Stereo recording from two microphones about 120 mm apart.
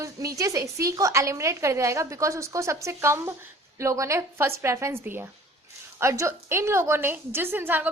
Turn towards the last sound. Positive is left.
turn(degrees=-15)  # may be behind; listen again after turning